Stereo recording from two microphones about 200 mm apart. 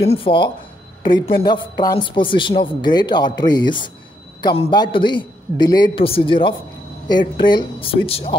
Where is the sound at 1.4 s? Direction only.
20° left (ahead or behind).